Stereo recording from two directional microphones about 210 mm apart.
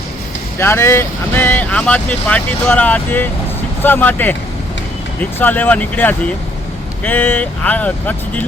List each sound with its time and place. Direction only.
0.6 s speech: 10° left (ahead or behind)
5.4 s speech: 10° left (ahead or behind)